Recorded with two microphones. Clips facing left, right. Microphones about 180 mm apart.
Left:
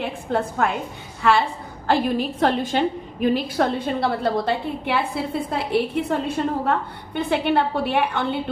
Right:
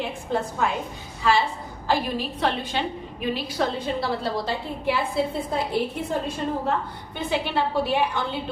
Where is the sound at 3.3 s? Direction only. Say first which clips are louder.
Left 1 dB; 55° left (ahead or behind).